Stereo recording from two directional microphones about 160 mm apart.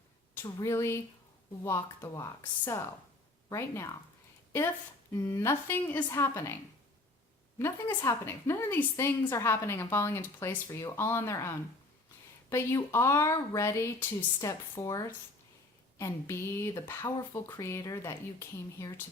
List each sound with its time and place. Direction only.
0.4 s a woman's voice: 20° left (ahead or behind)
3.5 s a woman's voice: 15° left (ahead or behind)
5.1 s a woman's voice: 20° left (ahead or behind)
7.6 s a woman's voice: 15° left (ahead or behind)